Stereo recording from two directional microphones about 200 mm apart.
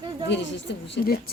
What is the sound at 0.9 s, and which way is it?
Speech, 50° left (ahead or behind).